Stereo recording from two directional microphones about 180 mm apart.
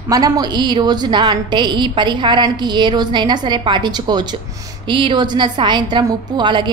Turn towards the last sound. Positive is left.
turn(degrees=-25)  # may be behind; listen again after turning